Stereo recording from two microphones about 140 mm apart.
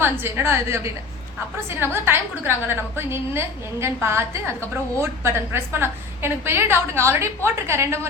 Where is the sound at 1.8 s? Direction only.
15° right (ahead or behind).